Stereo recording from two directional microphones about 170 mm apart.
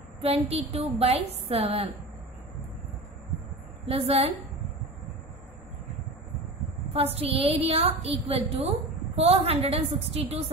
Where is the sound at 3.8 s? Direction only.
35° right (ahead or behind).